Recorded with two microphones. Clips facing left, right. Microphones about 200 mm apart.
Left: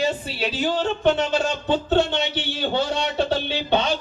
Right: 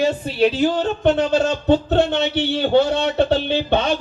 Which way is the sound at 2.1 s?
60° right (ahead or behind).